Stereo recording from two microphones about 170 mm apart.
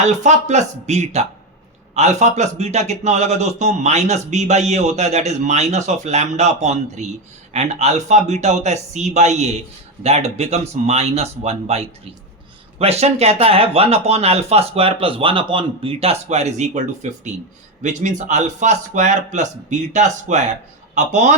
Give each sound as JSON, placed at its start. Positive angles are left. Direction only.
{"t": 0.0, "sound": "a man's voice", "side_deg": -45}